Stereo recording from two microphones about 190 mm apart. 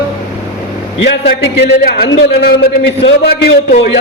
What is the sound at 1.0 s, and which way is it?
A man's voice, 60° left (ahead or behind).